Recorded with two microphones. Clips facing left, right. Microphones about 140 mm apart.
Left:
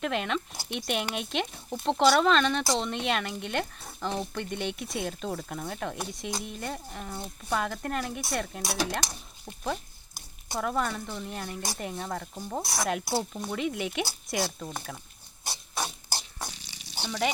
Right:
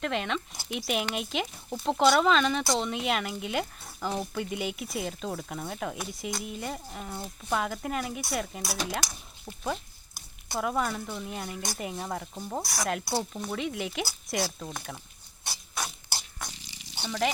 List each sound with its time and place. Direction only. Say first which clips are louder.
0.0 s speech: left 1 dB; centre (ahead or behind)
15.4 s rodents: left 2 dB; 25° left (ahead or behind)
17.0 s speech: even; 5° left (ahead or behind)